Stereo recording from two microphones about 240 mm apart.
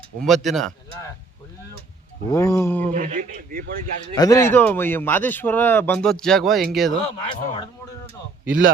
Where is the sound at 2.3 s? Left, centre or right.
Centre.